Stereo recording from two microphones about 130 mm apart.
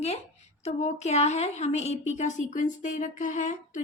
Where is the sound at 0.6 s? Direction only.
60° left (ahead or behind).